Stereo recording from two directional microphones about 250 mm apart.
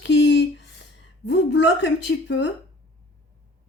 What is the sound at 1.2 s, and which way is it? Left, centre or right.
A woman's voice, left.